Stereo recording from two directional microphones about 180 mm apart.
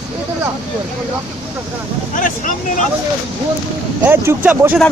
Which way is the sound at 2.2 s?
45° left (ahead or behind).